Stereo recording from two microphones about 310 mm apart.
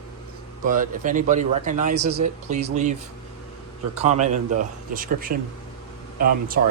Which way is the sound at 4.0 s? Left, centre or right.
Right.